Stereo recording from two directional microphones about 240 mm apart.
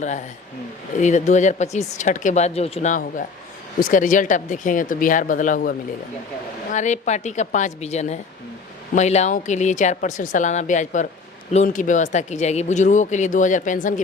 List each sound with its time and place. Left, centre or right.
0.0 s speech: left
6.7 s speech: left